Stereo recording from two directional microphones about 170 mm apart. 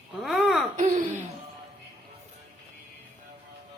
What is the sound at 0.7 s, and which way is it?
Speech, 50° right (ahead or behind).